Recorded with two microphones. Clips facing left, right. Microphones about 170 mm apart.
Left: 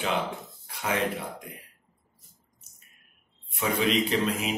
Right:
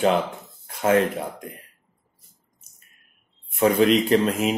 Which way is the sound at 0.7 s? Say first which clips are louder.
Right 10 dB; 50° right (ahead or behind).